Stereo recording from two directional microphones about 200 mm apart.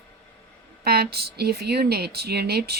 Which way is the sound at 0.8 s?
50° right (ahead or behind).